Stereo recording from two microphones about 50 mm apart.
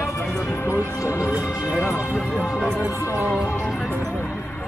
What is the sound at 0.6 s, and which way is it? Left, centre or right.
Speech, left.